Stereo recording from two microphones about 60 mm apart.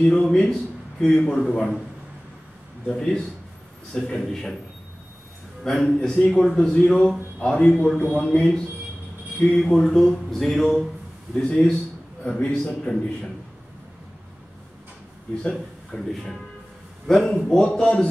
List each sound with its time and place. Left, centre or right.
0.0 s a man's voice: centre
2.9 s a man's voice: centre
5.6 s a man's voice: centre
7.3 s a man's voice: centre
9.5 s a man's voice: centre
15.9 s a man's voice: centre